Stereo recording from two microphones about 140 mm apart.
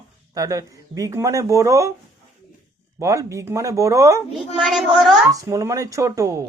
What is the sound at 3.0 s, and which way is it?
A man's voice, 20° right (ahead or behind).